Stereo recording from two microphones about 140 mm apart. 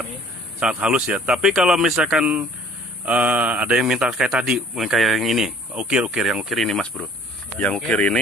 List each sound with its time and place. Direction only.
0.6 s a man's voice: 5° right (ahead or behind)